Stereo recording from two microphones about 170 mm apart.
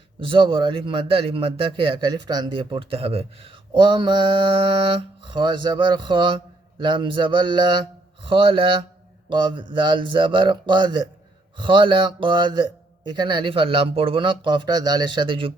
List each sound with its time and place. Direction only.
0.2 s a man's voice: 30° right (ahead or behind)